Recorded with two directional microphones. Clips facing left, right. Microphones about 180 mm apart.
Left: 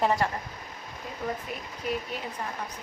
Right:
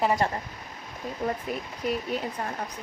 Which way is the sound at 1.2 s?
40° right (ahead or behind).